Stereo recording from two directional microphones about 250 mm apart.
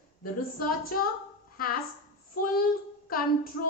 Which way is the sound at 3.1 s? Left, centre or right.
Left.